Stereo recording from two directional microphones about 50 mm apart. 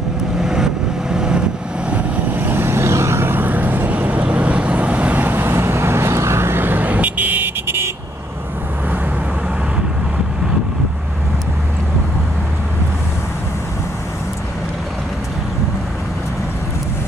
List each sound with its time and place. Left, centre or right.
0.4 s vehicle: centre
2.3 s vehicle: right
3.3 s vehicle: right
7.6 s vehicle: right